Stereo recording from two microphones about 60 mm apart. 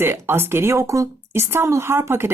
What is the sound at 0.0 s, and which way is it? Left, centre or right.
Speech, right.